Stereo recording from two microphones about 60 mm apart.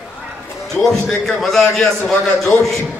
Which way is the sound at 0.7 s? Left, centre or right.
Centre.